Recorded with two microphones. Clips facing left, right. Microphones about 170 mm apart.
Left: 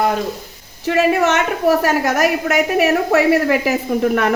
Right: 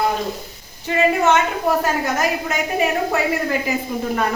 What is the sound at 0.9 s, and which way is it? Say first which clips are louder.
A woman's voice: left 2 dB; 75° left (ahead or behind).